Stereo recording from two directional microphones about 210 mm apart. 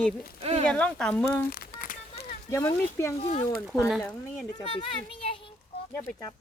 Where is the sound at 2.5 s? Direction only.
10° left (ahead or behind).